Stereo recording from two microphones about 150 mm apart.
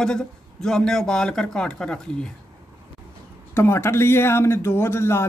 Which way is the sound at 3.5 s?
15° left (ahead or behind).